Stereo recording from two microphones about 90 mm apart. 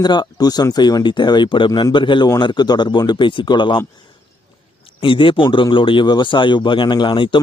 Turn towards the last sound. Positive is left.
turn(degrees=65)  # may be behind; listen again after turning